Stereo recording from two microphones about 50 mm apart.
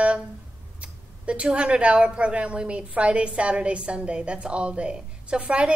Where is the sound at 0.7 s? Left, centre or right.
Right.